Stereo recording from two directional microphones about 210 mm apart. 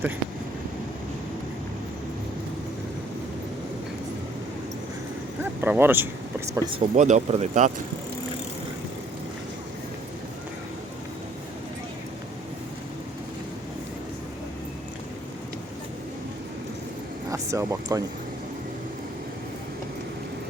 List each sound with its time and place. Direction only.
5.4 s speech: 10° right (ahead or behind)
6.7 s speech: 35° right (ahead or behind)
17.3 s speech: 15° right (ahead or behind)